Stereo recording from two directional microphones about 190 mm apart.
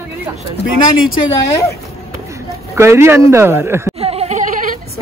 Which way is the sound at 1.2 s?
15° left (ahead or behind).